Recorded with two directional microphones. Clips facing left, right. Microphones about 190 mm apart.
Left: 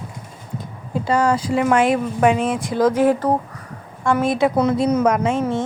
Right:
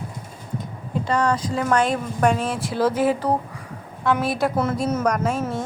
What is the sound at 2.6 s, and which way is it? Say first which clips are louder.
Speech: left 4 dB; 5° right (ahead or behind).